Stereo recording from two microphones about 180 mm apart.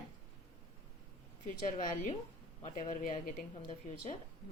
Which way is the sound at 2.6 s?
40° left (ahead or behind).